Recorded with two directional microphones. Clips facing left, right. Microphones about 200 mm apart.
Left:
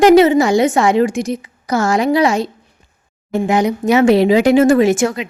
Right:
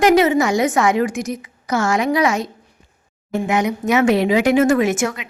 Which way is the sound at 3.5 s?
35° left (ahead or behind).